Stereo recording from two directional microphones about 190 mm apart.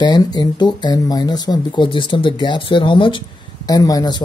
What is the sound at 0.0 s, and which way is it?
Speech, 20° left (ahead or behind).